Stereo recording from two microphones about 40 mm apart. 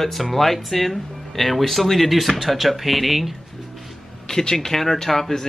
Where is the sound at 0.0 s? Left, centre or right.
Centre.